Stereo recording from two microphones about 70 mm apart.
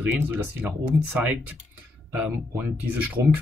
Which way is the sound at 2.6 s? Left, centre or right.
Right.